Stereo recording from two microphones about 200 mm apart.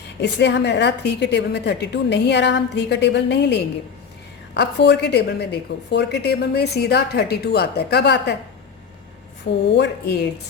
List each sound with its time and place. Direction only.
0.2 s a woman's voice: 60° left (ahead or behind)
9.7 s a woman's voice: 55° left (ahead or behind)